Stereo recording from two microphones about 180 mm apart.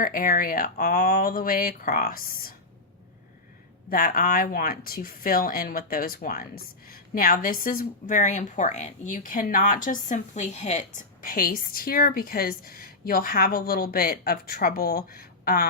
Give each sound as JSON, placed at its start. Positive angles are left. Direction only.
{"t": 0.0, "sound": "speech", "side_deg": 50}
{"t": 3.8, "sound": "speech", "side_deg": 50}